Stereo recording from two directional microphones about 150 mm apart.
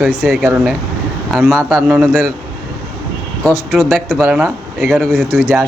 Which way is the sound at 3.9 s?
5° right (ahead or behind).